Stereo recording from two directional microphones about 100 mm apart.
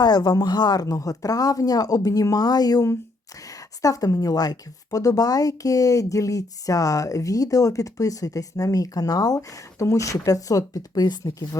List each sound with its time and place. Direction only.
0.0 s speech: 40° left (ahead or behind)